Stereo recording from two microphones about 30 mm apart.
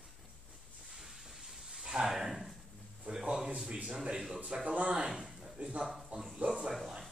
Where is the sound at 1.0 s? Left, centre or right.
Centre.